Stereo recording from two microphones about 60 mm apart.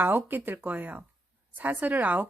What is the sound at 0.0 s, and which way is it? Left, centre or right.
Speech, right.